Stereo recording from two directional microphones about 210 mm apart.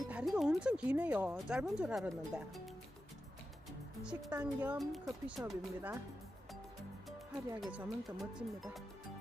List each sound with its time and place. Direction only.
0.1 s speech: 5° right (ahead or behind)
4.0 s speech: 5° right (ahead or behind)
5.0 s speech: 15° right (ahead or behind)
7.6 s speech: 5° right (ahead or behind)